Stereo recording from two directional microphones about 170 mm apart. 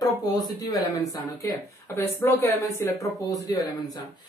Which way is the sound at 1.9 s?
10° left (ahead or behind).